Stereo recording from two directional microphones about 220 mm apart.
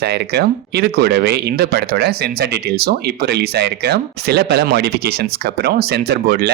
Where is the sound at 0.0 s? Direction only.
45° right (ahead or behind).